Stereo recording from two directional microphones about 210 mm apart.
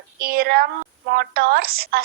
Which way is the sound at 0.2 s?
45° right (ahead or behind).